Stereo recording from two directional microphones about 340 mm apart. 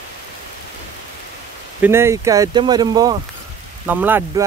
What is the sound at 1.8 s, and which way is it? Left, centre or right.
Speech, centre.